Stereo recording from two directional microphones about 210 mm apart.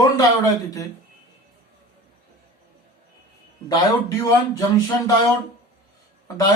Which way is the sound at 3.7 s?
15° left (ahead or behind).